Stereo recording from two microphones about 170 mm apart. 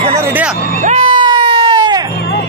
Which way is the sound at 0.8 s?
30° right (ahead or behind).